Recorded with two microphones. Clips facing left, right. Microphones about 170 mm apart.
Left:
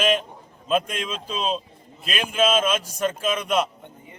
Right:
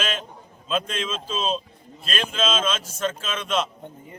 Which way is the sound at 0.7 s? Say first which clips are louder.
Left 3 dB; 15° left (ahead or behind).